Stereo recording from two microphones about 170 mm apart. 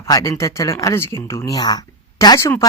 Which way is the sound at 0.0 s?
20° left (ahead or behind).